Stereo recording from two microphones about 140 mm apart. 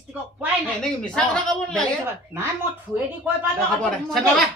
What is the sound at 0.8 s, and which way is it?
A man's voice, 5° left (ahead or behind).